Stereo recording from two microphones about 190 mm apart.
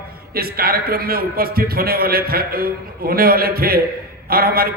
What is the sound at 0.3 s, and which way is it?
A man's voice, 50° right (ahead or behind).